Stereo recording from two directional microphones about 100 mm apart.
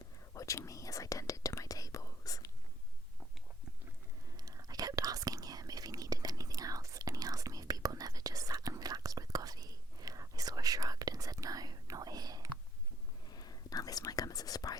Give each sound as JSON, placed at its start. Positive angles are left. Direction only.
{"t": 0.3, "sound": "whispering", "side_deg": 30}
{"t": 4.4, "sound": "whispering", "side_deg": -40}
{"t": 13.3, "sound": "whispering", "side_deg": 40}